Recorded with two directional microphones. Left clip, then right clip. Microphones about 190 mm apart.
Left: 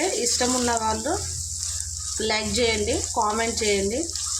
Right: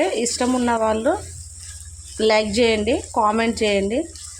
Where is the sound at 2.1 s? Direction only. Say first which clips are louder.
Right 7 dB; 45° right (ahead or behind).